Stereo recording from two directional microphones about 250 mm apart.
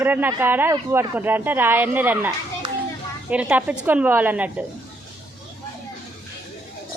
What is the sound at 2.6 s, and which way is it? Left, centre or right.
Hands, centre.